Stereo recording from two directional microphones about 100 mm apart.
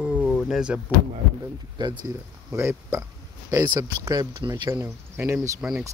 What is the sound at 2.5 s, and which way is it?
Speech, 30° right (ahead or behind).